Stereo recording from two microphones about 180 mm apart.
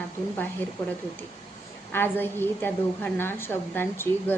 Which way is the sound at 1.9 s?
10° left (ahead or behind).